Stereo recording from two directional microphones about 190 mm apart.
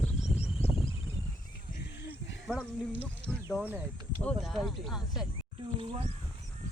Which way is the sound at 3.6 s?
10° right (ahead or behind).